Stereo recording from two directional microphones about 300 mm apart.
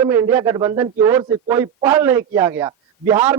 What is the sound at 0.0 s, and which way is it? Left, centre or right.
Speech, centre.